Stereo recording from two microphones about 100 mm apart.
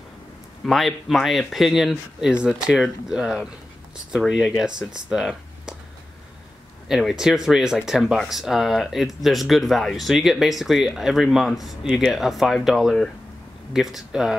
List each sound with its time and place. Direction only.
0.7 s speech: centre (ahead or behind)
6.9 s speech: 5° right (ahead or behind)